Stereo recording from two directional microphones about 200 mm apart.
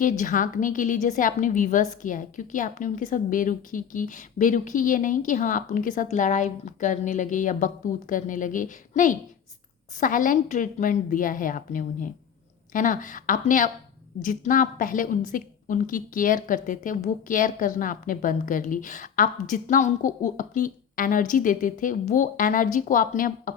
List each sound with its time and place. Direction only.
0.0 s a woman's voice: 40° left (ahead or behind)